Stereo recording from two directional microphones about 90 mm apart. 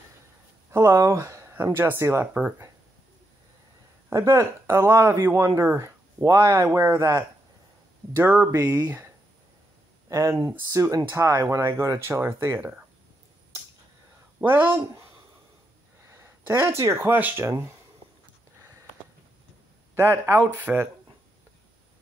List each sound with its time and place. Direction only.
0.7 s speech: 35° right (ahead or behind)
4.1 s speech: 30° right (ahead or behind)
8.3 s speech: 25° right (ahead or behind)
14.4 s speech: 20° right (ahead or behind)
16.1 s speech: 30° right (ahead or behind)
20.0 s speech: 30° right (ahead or behind)